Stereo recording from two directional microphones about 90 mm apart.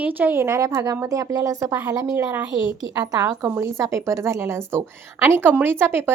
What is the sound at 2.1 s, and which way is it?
Speech, 20° right (ahead or behind).